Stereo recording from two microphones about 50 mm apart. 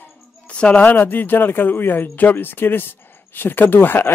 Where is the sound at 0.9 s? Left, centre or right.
Left.